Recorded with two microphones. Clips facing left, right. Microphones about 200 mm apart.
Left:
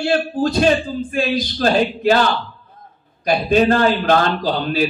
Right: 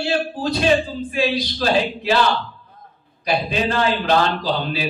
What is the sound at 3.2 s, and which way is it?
Speech, 50° left (ahead or behind).